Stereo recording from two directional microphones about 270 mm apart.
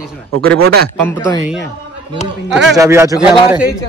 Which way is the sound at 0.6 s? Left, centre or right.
Right.